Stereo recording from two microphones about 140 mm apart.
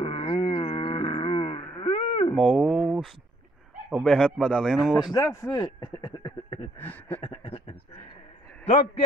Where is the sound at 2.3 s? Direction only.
Centre (ahead or behind).